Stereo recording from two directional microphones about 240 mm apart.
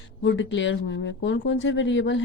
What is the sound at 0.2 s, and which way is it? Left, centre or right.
Speech, left.